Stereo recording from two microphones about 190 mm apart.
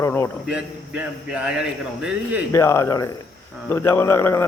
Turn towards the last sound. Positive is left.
turn(degrees=15)  # may be behind; listen again after turning